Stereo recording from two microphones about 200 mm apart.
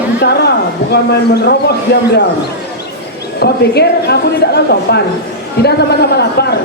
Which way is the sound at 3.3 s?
55° left (ahead or behind).